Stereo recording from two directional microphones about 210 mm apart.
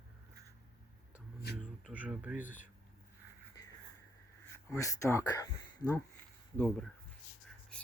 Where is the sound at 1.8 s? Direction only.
5° right (ahead or behind).